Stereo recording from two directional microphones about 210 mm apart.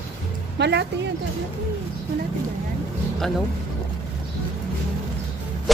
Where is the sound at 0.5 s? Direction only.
55° right (ahead or behind).